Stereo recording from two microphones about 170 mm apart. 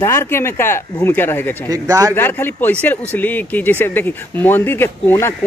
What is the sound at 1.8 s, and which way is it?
Speech, 20° right (ahead or behind).